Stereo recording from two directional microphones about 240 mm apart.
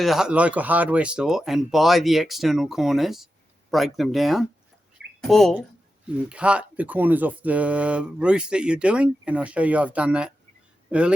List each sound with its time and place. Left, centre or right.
0.0 s speech: centre